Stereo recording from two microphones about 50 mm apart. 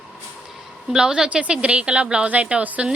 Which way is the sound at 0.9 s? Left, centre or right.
Centre.